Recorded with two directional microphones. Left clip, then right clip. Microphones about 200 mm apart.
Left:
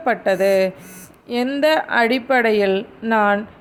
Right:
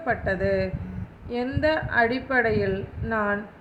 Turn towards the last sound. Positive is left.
turn(degrees=40)  # may be behind; listen again after turning